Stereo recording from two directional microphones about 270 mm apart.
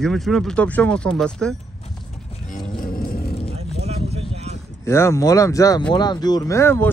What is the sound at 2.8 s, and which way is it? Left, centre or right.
Music, left.